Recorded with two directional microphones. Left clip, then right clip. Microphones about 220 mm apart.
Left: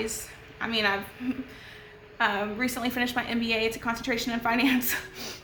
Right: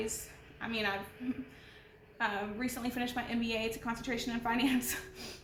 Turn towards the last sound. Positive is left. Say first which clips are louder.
# left 7 dB
turn(degrees=20)  # may be behind; listen again after turning